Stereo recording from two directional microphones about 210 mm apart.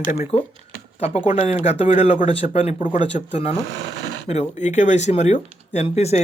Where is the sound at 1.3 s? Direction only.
30° left (ahead or behind).